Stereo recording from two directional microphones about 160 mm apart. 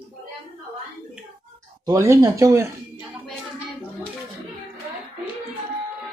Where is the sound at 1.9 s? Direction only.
20° right (ahead or behind).